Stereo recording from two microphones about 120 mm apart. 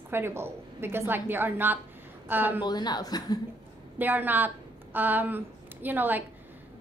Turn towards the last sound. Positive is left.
turn(degrees=-15)  # may be behind; listen again after turning